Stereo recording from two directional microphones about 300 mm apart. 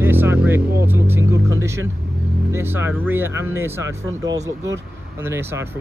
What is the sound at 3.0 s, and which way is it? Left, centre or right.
Speech, centre.